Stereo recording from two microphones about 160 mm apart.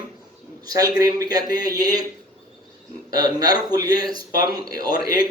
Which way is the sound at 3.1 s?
25° right (ahead or behind).